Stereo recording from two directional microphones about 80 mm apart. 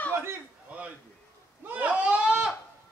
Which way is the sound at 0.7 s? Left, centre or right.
Centre.